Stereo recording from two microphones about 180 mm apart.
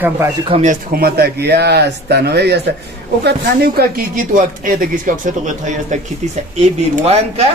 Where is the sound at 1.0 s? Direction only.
60° right (ahead or behind); by 7.4 s 40° right (ahead or behind).